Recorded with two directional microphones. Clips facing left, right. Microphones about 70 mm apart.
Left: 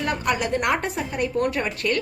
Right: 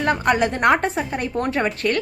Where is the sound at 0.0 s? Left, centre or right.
Right.